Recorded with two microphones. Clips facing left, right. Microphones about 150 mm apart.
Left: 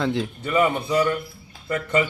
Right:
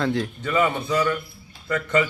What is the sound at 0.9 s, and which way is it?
Speech, 30° left (ahead or behind).